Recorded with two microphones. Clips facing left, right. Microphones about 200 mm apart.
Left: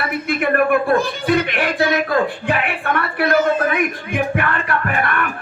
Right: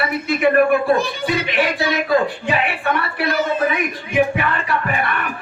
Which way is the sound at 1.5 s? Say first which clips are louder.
Left 1 dB; 55° left (ahead or behind).